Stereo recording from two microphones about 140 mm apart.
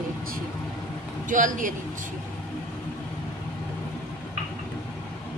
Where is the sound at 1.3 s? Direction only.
70° right (ahead or behind).